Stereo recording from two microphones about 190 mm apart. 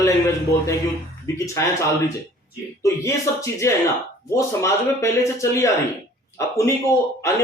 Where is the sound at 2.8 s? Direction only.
15° left (ahead or behind).